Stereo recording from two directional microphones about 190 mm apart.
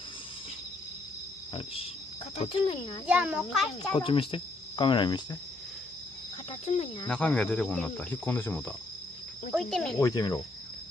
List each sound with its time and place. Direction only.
1.5 s speech: 30° left (ahead or behind)
3.1 s a child's voice: 5° right (ahead or behind)
3.9 s speech: 30° left (ahead or behind)
6.6 s speech: 35° left (ahead or behind)
7.1 s a child's voice: 5° left (ahead or behind)
9.9 s speech: 20° left (ahead or behind)